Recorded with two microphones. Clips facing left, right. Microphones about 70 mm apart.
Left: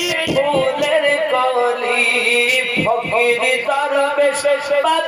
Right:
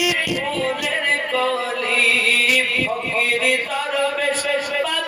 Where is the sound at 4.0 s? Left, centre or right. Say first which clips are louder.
Left 4 dB; left.